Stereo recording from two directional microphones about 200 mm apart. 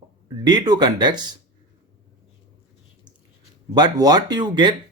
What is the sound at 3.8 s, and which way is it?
Speech, 20° right (ahead or behind).